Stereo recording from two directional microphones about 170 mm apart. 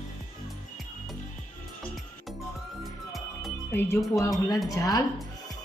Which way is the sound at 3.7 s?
15° left (ahead or behind).